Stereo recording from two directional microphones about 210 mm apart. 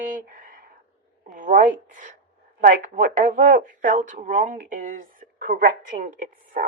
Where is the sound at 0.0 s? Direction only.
40° right (ahead or behind).